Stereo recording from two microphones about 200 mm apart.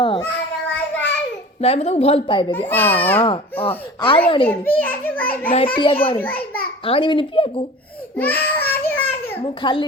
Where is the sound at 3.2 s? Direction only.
25° left (ahead or behind).